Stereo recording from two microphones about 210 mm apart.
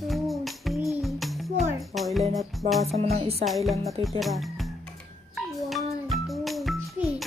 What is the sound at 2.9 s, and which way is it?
Speech, 30° right (ahead or behind).